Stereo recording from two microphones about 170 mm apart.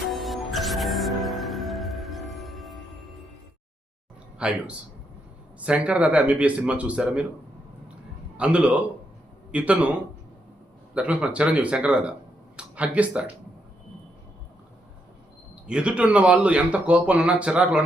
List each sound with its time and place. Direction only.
0.0 s music: centre (ahead or behind)
4.4 s speech: 5° right (ahead or behind)
8.4 s speech: 5° right (ahead or behind)
10.9 s speech: 5° right (ahead or behind)
15.6 s speech: 5° right (ahead or behind)